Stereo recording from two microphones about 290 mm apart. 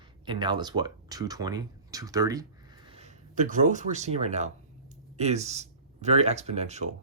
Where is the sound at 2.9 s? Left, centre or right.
Right.